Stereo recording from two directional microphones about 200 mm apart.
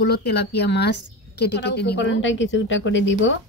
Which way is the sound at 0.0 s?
55° left (ahead or behind).